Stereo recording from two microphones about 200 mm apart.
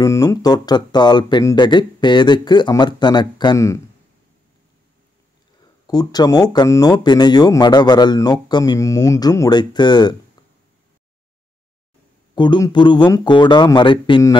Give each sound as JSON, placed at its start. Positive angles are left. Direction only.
{"t": 0.0, "sound": "speech", "side_deg": 15}
{"t": 5.9, "sound": "speech", "side_deg": 20}
{"t": 12.4, "sound": "speech", "side_deg": 20}